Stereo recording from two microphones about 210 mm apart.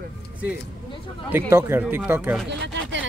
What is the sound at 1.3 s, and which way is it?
Speech, 10° right (ahead or behind).